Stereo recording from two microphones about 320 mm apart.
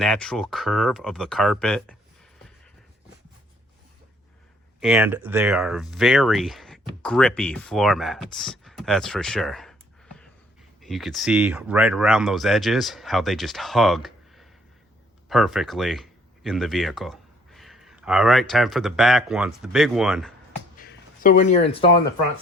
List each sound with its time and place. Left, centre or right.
0.0 s speech: centre
4.8 s speech: centre
10.8 s speech: centre
20.8 s a sound: left